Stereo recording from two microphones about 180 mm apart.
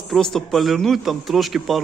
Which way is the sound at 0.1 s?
Centre (ahead or behind).